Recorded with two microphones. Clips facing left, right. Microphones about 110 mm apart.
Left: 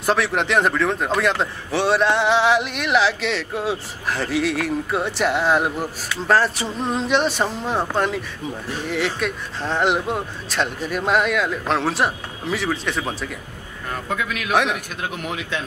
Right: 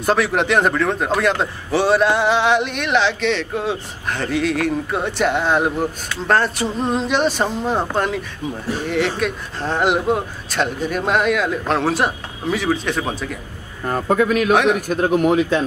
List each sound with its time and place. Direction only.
0.0 s speech: centre (ahead or behind)
13.8 s speech: 40° right (ahead or behind)
14.5 s speech: centre (ahead or behind)
14.9 s speech: 40° right (ahead or behind)